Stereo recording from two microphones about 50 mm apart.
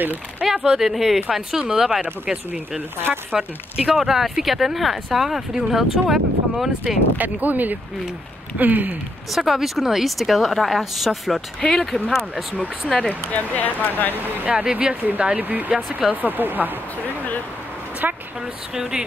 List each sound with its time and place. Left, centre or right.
0.5 s speech: centre
7.2 s speech: right
9.3 s speech: centre
11.6 s speech: centre
13.3 s speech: left
14.1 s speech: right
14.5 s speech: right
18.0 s speech: right